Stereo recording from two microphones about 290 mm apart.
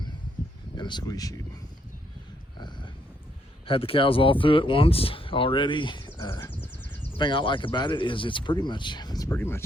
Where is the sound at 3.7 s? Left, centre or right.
Centre.